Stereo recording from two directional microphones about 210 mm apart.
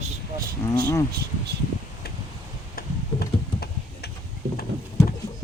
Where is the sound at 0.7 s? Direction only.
15° left (ahead or behind).